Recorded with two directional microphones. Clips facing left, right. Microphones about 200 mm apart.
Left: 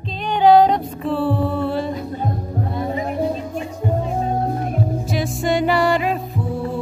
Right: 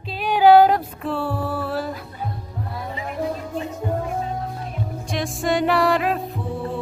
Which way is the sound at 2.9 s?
35° left (ahead or behind).